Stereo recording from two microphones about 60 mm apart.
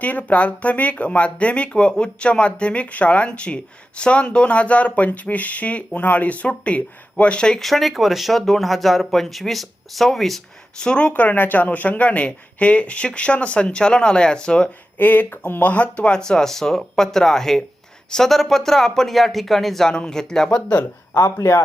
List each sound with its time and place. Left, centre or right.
0.0 s speech: left
7.6 s speech: centre
11.1 s speech: left
14.9 s speech: left; by 20.6 s centre
21.2 s speech: left